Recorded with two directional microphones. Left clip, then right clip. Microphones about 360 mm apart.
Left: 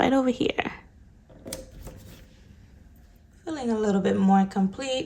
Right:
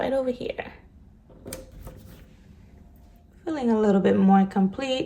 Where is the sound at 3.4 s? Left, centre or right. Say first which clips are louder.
Right 4 dB; centre.